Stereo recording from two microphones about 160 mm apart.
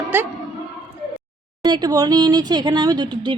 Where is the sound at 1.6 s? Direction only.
25° right (ahead or behind).